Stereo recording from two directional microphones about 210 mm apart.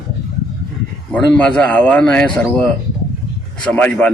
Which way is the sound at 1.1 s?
5° left (ahead or behind).